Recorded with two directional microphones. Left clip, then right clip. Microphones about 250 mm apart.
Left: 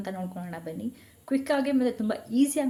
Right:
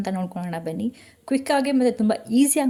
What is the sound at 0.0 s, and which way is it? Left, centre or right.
A woman's voice, right.